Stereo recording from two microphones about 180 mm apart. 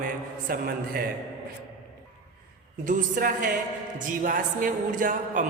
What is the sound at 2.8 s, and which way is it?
A man's voice, 50° right (ahead or behind).